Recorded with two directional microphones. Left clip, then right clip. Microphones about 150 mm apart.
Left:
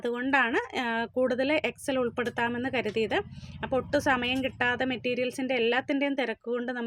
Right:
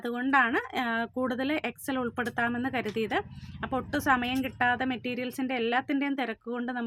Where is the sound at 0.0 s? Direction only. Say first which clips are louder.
Even; 15° left (ahead or behind).